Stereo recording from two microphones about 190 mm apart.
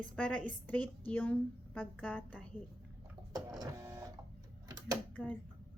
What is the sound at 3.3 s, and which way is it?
Printer, 20° right (ahead or behind).